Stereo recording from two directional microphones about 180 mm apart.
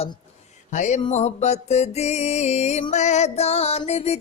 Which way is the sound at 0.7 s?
40° left (ahead or behind).